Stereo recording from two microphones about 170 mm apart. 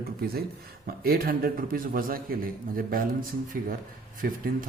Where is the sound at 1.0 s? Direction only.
60° right (ahead or behind).